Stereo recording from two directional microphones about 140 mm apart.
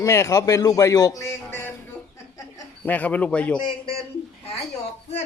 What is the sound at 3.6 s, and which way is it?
Speech, 40° left (ahead or behind).